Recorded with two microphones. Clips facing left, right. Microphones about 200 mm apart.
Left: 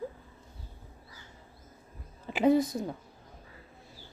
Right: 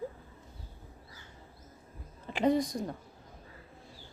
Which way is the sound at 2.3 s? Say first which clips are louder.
Left 3 dB; 5° left (ahead or behind).